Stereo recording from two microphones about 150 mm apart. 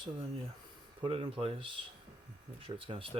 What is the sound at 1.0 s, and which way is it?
Speech, 35° right (ahead or behind).